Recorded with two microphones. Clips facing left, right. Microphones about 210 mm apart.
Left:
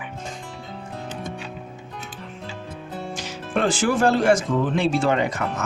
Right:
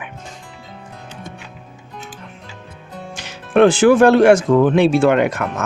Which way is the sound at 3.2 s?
65° right (ahead or behind).